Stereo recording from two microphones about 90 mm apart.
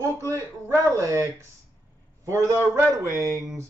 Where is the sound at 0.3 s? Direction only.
35° right (ahead or behind).